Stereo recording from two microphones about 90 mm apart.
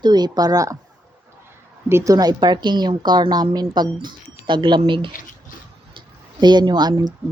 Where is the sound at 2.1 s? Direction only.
45° right (ahead or behind); by 5.1 s 65° right (ahead or behind).